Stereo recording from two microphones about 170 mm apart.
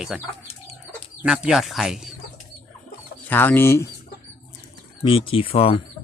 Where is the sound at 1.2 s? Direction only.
5° right (ahead or behind).